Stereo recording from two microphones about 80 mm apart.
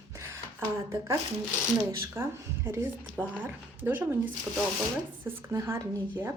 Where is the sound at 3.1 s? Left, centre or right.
Right.